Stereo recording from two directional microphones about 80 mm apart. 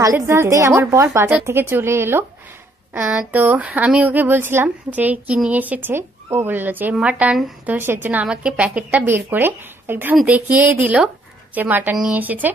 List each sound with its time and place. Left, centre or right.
0.0 s a woman's voice: right
11.9 s speech: centre
12.2 s a woman's voice: right